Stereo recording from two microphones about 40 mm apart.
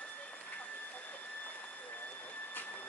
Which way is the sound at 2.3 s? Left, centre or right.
Left.